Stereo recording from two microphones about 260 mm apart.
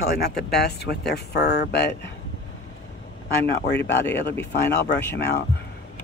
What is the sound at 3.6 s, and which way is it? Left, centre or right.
Speech, left.